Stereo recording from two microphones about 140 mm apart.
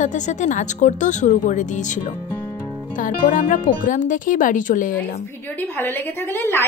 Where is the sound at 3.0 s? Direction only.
75° left (ahead or behind).